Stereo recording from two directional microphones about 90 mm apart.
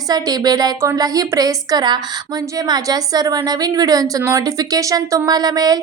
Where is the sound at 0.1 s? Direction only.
50° right (ahead or behind).